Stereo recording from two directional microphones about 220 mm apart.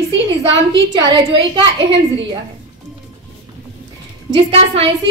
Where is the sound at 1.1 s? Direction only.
20° right (ahead or behind).